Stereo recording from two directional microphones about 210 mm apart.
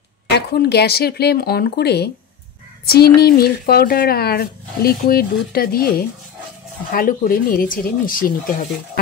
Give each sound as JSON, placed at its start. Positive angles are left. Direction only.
{"t": 0.5, "sound": "speech", "side_deg": 50}